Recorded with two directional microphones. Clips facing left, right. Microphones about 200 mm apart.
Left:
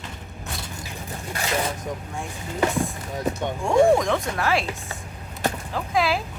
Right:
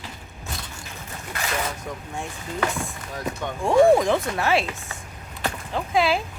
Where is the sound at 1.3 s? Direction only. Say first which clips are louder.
Left 2 dB; 30° left (ahead or behind).